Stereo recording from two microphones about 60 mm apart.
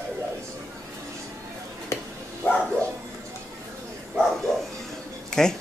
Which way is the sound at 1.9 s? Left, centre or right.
Left.